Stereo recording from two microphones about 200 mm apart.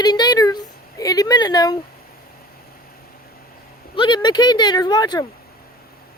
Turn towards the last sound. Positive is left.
turn(degrees=20)  # may be behind; listen again after turning